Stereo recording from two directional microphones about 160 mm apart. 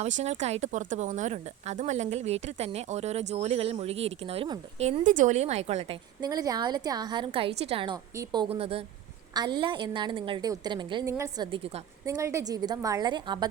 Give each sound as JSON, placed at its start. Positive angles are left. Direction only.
{"t": 0.0, "sound": "speech", "side_deg": -45}
{"t": 4.8, "sound": "speech", "side_deg": -50}
{"t": 6.2, "sound": "a woman's voice", "side_deg": -25}
{"t": 8.1, "sound": "speech", "side_deg": -25}
{"t": 9.3, "sound": "a woman's voice", "side_deg": -25}